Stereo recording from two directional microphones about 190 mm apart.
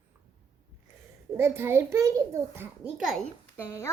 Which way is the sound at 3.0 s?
5° left (ahead or behind).